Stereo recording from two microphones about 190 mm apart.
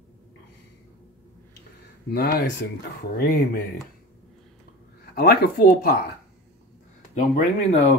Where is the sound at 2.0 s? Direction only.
60° left (ahead or behind).